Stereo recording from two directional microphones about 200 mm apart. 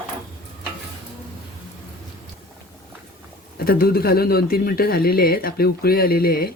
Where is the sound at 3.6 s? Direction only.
45° left (ahead or behind).